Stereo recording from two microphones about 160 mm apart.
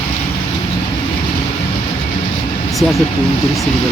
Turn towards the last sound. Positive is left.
turn(degrees=0)  # may be behind; listen again after turning